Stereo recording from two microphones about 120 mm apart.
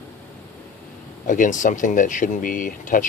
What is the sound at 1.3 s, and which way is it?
Speech, 90° left.